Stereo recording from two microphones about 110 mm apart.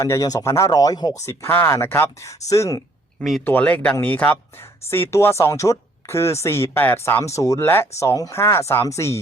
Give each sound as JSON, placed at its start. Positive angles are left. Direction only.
{"t": 0.0, "sound": "speech", "side_deg": 30}
{"t": 1.3, "sound": "speech", "side_deg": 20}
{"t": 3.2, "sound": "speech", "side_deg": 0}
{"t": 3.4, "sound": "speech", "side_deg": 15}